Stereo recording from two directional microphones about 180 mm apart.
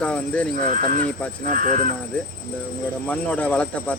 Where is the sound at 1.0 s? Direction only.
5° left (ahead or behind).